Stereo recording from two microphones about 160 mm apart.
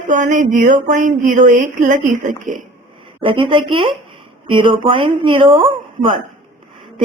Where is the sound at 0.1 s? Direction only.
55° right (ahead or behind).